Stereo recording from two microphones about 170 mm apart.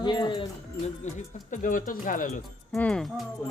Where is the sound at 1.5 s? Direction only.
50° left (ahead or behind).